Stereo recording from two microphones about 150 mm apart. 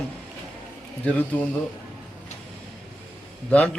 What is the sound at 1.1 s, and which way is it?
Speech, 10° left (ahead or behind).